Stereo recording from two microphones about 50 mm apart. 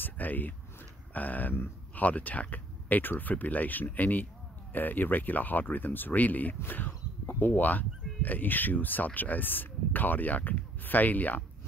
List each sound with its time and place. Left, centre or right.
0.0 s speech: left